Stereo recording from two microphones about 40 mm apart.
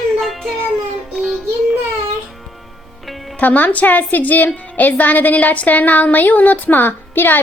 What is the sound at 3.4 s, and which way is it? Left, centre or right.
A woman's voice, left.